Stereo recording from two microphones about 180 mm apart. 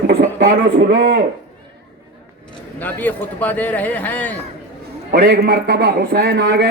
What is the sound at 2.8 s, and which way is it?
Speech, 10° left (ahead or behind).